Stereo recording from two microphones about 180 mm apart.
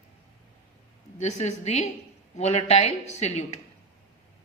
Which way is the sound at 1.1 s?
40° left (ahead or behind).